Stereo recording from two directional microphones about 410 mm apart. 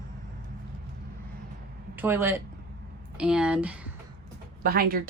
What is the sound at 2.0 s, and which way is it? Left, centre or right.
Speech, centre.